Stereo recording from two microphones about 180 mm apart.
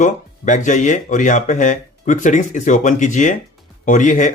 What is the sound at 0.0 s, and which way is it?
Speech, 45° left (ahead or behind).